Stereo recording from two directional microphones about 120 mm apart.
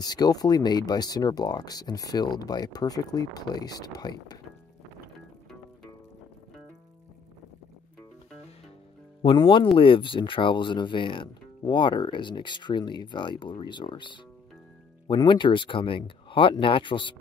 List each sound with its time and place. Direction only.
0.0 s speech: 35° left (ahead or behind)
9.2 s speech: 45° left (ahead or behind)